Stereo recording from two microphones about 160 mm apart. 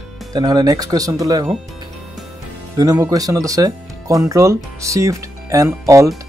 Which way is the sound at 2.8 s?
20° right (ahead or behind).